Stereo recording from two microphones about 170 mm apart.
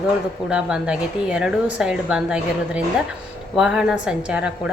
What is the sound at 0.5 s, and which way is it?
A woman's voice, 5° right (ahead or behind).